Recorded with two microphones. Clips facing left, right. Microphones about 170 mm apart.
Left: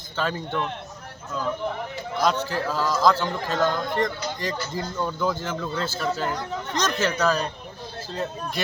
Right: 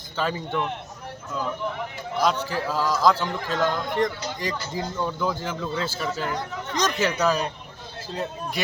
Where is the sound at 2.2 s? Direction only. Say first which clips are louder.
Even; 5° right (ahead or behind).